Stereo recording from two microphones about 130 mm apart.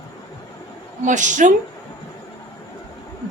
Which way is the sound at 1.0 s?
70° right (ahead or behind).